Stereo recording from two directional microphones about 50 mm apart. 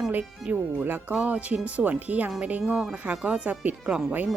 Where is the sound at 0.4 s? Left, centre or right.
Right.